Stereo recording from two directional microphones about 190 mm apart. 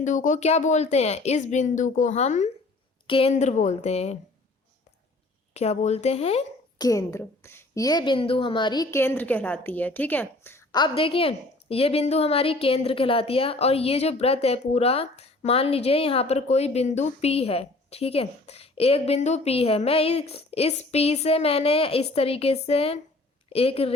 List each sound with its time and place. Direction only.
0.0 s speech: 40° left (ahead or behind)
5.5 s speech: 35° left (ahead or behind)
6.7 s a woman's voice: 20° left (ahead or behind)